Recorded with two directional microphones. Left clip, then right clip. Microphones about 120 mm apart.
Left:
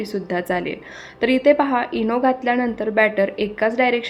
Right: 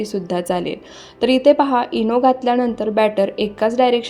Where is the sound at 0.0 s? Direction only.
40° right (ahead or behind).